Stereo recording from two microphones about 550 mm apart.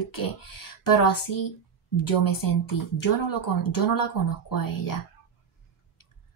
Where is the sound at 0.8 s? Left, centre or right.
Left.